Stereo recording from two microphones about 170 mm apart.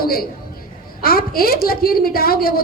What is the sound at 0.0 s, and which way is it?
A woman's voice, 60° left (ahead or behind).